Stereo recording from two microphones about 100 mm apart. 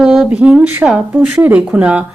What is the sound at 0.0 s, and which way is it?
A woman's voice, 10° right (ahead or behind).